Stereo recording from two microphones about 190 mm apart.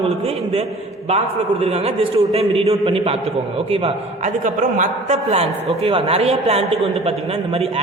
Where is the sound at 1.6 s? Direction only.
35° right (ahead or behind).